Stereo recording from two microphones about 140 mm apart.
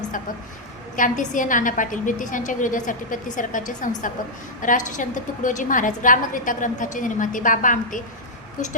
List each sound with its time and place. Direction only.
0.9 s a woman's voice: 65° left (ahead or behind)